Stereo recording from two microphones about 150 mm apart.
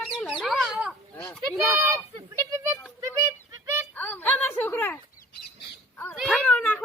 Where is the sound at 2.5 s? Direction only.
20° right (ahead or behind).